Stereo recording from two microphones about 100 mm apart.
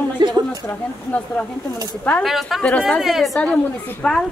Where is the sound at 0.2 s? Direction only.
50° right (ahead or behind).